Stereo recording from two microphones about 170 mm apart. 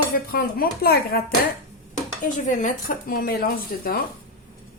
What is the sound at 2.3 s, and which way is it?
Speech, 45° left (ahead or behind).